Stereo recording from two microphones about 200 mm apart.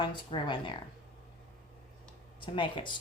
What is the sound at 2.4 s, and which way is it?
Speech, 25° left (ahead or behind).